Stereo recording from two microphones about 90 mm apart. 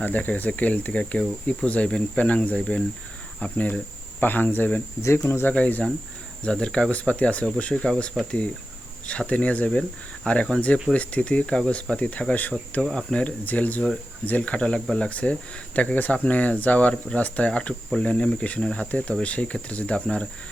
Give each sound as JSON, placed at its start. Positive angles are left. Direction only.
{"t": 0.0, "sound": "speech", "side_deg": 20}
{"t": 12.8, "sound": "speech", "side_deg": 5}